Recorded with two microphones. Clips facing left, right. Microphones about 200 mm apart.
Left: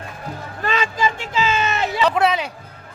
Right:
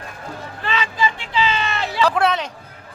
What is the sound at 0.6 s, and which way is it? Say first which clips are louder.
Vehicle: left 1 dB; 45° left (ahead or behind).